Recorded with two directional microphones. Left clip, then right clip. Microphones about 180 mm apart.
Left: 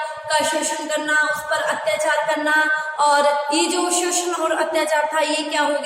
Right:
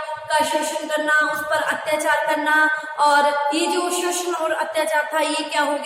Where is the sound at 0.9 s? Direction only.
5° right (ahead or behind).